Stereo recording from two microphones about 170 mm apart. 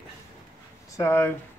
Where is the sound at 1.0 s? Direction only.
15° left (ahead or behind).